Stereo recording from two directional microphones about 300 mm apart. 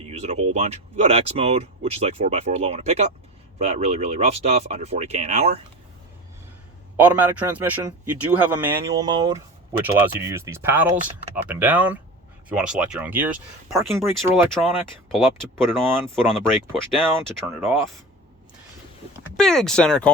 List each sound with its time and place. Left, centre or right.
0.0 s a sound: right
0.5 s speech: centre
6.9 s speech: centre
19.4 s speech: centre